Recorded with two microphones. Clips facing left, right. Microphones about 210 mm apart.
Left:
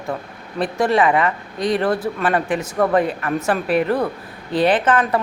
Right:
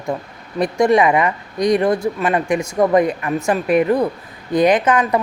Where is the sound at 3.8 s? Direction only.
10° right (ahead or behind).